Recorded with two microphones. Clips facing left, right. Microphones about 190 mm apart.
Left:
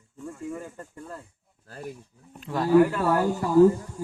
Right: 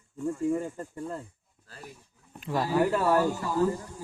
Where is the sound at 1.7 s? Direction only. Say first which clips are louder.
Left 9 dB; 55° left (ahead or behind).